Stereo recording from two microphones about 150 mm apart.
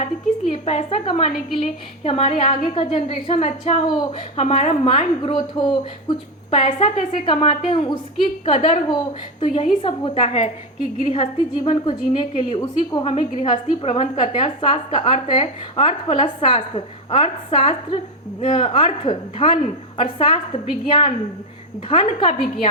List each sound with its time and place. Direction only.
0.5 s a woman's voice: 45° left (ahead or behind)
4.4 s a woman's voice: 45° left (ahead or behind); by 13.1 s 25° left (ahead or behind)
13.1 s a woman's voice: 40° left (ahead or behind)